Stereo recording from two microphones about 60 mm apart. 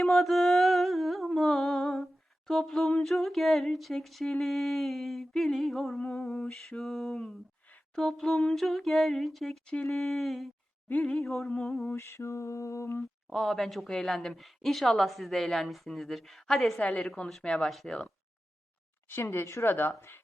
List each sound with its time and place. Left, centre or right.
0.0 s music: centre
2.5 s a woman's voice: centre
11.9 s mantra: left
13.3 s a woman's voice: centre
19.0 s mantra: left
19.6 s speech: left